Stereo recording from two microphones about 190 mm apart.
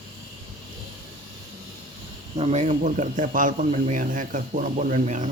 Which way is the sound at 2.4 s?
35° right (ahead or behind).